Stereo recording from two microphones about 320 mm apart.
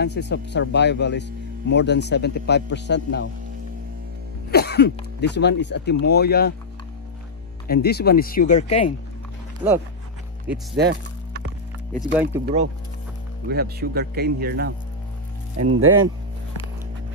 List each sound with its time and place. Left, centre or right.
0.0 s a man's voice: left
4.5 s a man's voice: left
7.6 s speech: left
10.8 s music: right
12.0 s speech: centre
13.5 s speech: right
15.5 s speech: right